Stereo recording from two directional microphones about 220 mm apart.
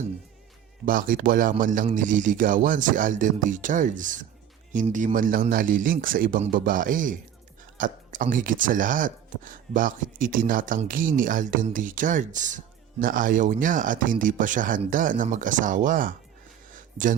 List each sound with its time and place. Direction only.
0.9 s speech: 40° right (ahead or behind)